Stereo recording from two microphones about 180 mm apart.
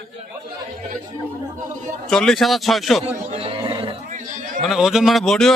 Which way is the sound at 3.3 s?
30° right (ahead or behind).